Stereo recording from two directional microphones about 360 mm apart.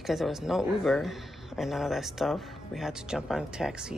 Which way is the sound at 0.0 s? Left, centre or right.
Centre.